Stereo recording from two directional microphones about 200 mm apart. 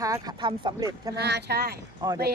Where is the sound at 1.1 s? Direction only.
55° right (ahead or behind).